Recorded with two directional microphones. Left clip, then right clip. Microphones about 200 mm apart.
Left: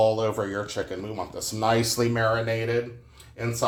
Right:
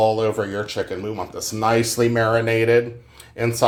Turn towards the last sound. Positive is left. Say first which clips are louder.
# right 8 dB
turn(degrees=-35)  # may be behind; listen again after turning